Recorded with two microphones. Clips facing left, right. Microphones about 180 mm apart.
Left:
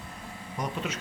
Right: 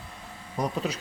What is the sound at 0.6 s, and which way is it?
Speech, 35° right (ahead or behind).